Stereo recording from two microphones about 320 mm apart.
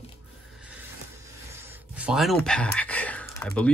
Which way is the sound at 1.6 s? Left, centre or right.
Centre.